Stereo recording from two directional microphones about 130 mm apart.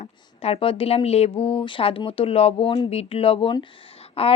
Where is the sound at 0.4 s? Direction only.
45° left (ahead or behind).